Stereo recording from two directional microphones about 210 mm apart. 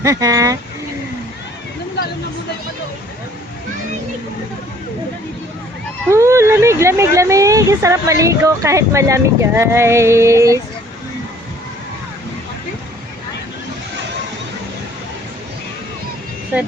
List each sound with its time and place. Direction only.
0.0 s a woman's voice: 15° right (ahead or behind)
6.1 s a woman's voice: 15° right (ahead or behind)